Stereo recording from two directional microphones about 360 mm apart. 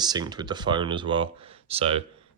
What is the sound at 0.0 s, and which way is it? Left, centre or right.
Speech, centre.